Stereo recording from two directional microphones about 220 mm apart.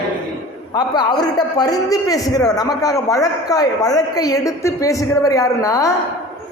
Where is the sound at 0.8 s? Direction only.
20° left (ahead or behind).